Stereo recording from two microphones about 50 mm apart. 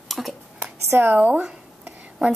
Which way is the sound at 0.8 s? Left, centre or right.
Right.